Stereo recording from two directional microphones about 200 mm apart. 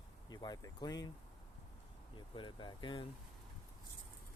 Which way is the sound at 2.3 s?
25° left (ahead or behind).